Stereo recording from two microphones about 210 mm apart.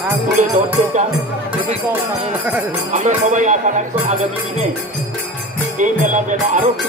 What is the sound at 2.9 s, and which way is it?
Speech, 35° right (ahead or behind).